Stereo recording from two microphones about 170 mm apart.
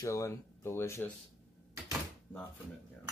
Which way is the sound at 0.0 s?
20° left (ahead or behind).